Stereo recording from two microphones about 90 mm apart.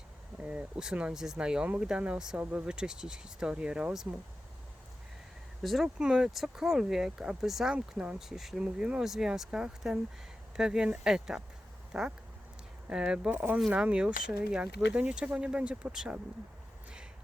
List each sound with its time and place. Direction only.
0.4 s speech: 10° right (ahead or behind)
5.6 s speech: centre (ahead or behind)
13.3 s speech: 20° right (ahead or behind)
13.7 s speech: 10° right (ahead or behind)